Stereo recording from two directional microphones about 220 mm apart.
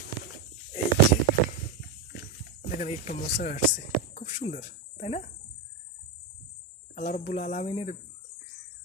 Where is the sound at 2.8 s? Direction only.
35° left (ahead or behind).